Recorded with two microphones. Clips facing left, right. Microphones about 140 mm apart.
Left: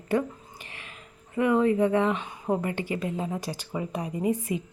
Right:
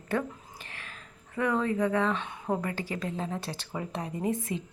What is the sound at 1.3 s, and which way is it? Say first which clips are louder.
A woman's voice: left 6 dB; 15° left (ahead or behind).